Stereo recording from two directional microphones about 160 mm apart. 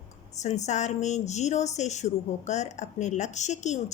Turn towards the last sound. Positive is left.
turn(degrees=45)  # may be behind; listen again after turning